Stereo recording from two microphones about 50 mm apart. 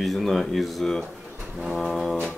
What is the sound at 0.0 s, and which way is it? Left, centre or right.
Speech, centre.